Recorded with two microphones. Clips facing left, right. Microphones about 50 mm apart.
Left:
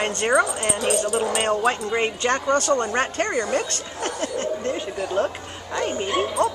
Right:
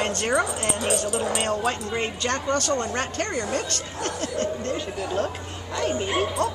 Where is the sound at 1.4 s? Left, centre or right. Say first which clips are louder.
Left 4 dB; left.